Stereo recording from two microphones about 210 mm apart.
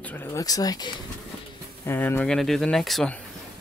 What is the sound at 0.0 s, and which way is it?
Speech, 10° left (ahead or behind).